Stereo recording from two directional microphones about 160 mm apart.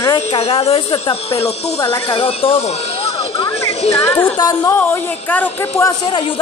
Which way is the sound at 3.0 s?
35° left (ahead or behind).